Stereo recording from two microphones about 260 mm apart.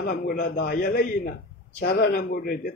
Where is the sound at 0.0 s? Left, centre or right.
Left.